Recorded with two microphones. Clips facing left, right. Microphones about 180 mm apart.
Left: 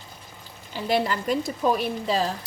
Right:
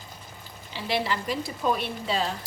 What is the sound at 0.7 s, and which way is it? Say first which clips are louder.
A woman's voice: left 4 dB; 45° left (ahead or behind).